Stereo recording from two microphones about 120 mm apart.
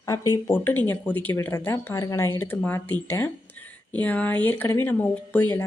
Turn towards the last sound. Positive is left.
turn(degrees=15)  # may be behind; listen again after turning